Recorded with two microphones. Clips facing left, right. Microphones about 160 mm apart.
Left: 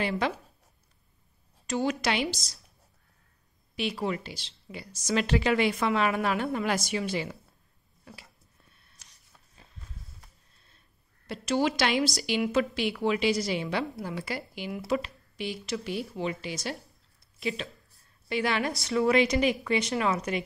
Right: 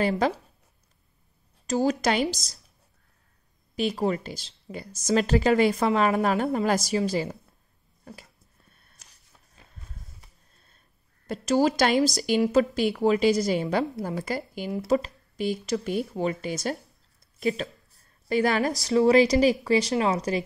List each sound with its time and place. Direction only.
0.0 s a woman's voice: 40° right (ahead or behind)
1.7 s a woman's voice: 40° right (ahead or behind)
3.7 s a woman's voice: 40° right (ahead or behind)
11.2 s a woman's voice: 40° right (ahead or behind)